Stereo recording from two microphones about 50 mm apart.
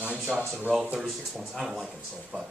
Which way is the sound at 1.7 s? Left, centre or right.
Centre.